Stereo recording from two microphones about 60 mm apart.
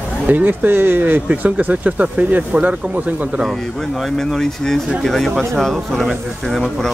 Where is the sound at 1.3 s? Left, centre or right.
Right.